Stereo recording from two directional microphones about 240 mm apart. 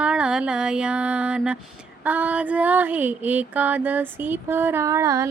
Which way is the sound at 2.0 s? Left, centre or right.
Centre.